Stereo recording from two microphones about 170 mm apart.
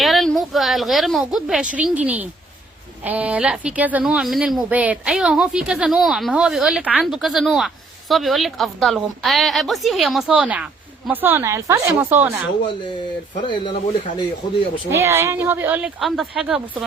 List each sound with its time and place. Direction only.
0.0 s a woman's voice: centre (ahead or behind)
13.5 s speech: 30° left (ahead or behind)
14.8 s a woman's voice: 15° right (ahead or behind)
16.0 s a woman's voice: centre (ahead or behind)